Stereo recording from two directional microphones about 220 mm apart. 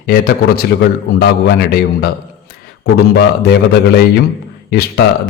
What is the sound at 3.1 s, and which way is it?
A man's voice, 45° left (ahead or behind).